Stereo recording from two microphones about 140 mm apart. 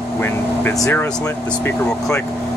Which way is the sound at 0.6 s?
15° left (ahead or behind).